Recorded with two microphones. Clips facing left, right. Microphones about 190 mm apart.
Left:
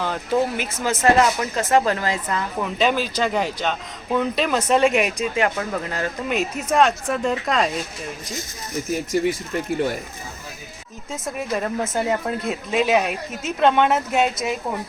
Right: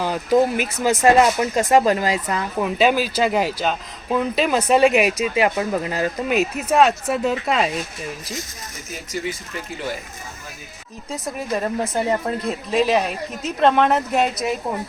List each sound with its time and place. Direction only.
0.0 s speech: 10° right (ahead or behind)
11.1 s speech: centre (ahead or behind)